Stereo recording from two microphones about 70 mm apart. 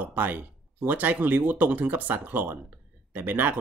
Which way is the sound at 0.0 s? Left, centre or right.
Right.